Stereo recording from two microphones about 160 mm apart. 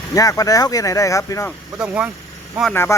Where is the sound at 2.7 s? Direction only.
15° left (ahead or behind).